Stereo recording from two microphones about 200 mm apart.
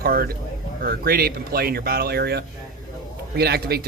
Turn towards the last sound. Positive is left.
turn(degrees=-50)  # may be behind; listen again after turning